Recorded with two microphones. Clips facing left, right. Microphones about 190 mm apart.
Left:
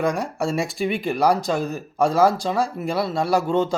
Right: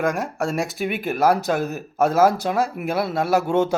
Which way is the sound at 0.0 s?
Centre (ahead or behind).